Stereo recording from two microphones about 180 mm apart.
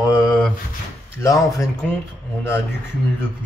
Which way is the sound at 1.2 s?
15° left (ahead or behind).